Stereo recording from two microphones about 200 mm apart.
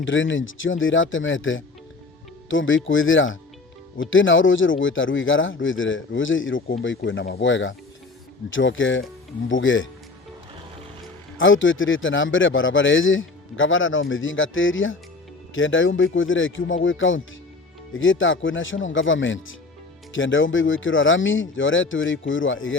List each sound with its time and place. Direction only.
0.0 s speech: 70° left (ahead or behind)
11.3 s speech: 75° left (ahead or behind)